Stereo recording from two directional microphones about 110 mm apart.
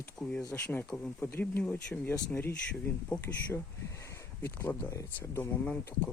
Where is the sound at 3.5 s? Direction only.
25° left (ahead or behind).